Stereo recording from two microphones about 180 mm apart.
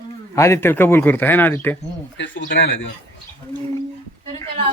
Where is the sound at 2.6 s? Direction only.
90° left.